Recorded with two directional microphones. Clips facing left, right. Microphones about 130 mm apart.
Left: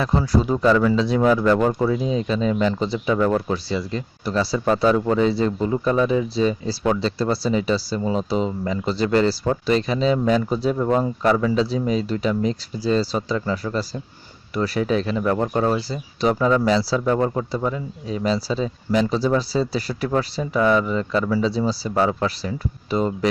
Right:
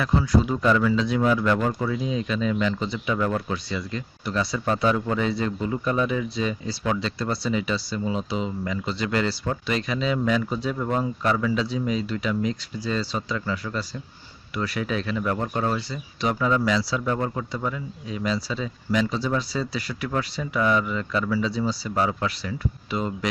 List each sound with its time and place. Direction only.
0.0 s speech: 35° left (ahead or behind)